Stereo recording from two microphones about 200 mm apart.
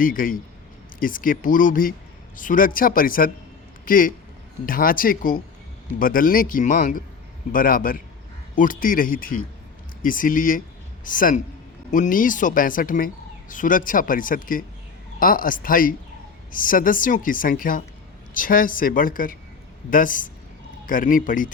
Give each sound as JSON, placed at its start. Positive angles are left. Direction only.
{"t": 0.0, "sound": "a man's voice", "side_deg": 45}